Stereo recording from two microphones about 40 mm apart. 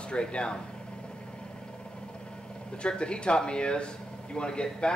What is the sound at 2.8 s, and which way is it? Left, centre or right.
Speech, left.